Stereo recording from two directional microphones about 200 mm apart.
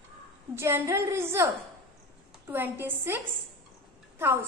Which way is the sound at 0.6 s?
10° right (ahead or behind).